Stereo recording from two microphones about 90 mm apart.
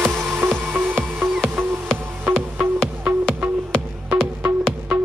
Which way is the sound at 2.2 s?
20° right (ahead or behind).